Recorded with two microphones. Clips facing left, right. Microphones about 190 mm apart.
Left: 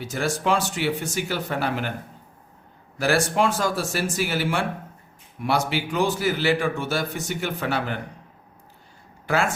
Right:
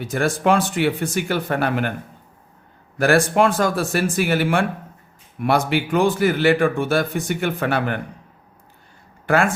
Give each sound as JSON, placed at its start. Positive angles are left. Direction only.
{"t": 0.0, "sound": "a man's voice", "side_deg": -55}
{"t": 3.0, "sound": "a man's voice", "side_deg": -55}
{"t": 9.2, "sound": "speech", "side_deg": -55}